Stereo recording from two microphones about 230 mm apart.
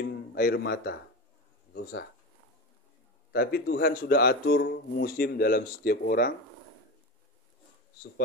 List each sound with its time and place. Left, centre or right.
0.0 s speech: left
3.3 s speech: left